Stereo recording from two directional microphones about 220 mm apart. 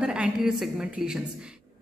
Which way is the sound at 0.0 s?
5° right (ahead or behind).